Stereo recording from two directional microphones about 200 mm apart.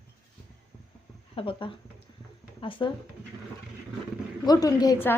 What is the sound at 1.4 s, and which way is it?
A woman's voice, 25° left (ahead or behind).